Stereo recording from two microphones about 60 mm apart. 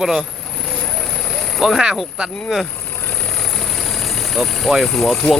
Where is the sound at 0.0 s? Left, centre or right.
Centre.